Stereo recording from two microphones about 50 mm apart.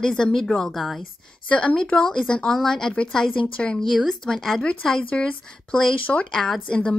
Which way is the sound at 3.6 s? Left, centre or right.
Left.